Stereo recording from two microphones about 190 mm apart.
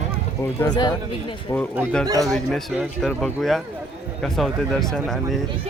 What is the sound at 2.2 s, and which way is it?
Speech, centre (ahead or behind).